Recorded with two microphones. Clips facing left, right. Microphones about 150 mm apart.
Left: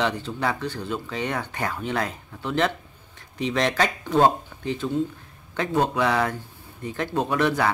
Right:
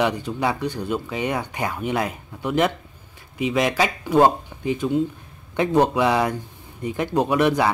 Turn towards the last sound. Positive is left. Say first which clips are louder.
# right 4 dB
turn(degrees=-15)  # may be behind; listen again after turning